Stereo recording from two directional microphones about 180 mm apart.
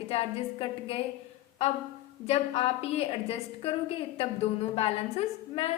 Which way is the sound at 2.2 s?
35° left (ahead or behind).